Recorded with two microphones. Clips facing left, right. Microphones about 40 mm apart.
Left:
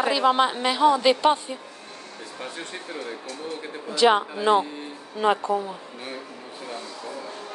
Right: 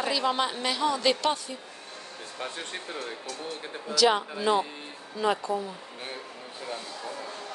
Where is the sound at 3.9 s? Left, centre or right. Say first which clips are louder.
Left 4 dB; left.